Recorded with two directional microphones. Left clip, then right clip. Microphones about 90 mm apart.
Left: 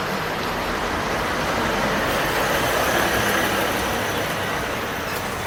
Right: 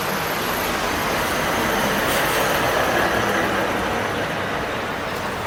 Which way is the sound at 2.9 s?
30° left (ahead or behind).